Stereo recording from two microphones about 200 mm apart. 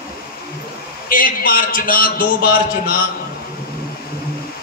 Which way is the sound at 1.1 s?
45° left (ahead or behind).